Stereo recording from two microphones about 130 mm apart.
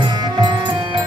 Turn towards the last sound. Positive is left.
turn(degrees=-35)  # may be behind; listen again after turning